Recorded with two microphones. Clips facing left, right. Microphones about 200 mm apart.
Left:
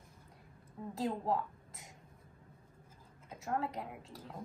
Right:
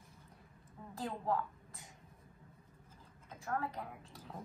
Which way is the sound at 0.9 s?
25° left (ahead or behind).